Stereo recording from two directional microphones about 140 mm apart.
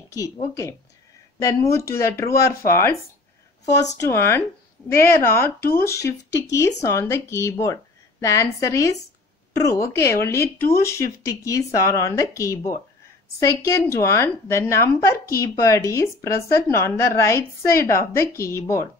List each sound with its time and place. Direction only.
0.1 s a woman's voice: 25° left (ahead or behind)
3.7 s a woman's voice: 20° left (ahead or behind)